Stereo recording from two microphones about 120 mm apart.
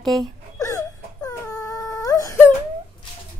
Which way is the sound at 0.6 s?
25° left (ahead or behind).